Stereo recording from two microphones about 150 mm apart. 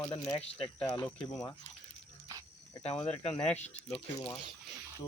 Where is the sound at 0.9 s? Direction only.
15° left (ahead or behind).